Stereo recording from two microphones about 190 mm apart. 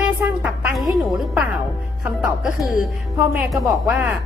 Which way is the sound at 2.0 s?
5° right (ahead or behind).